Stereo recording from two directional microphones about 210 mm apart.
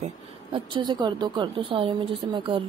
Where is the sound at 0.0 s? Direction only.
25° right (ahead or behind).